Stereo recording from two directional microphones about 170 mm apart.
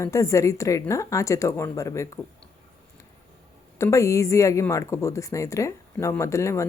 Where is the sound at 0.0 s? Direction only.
20° left (ahead or behind).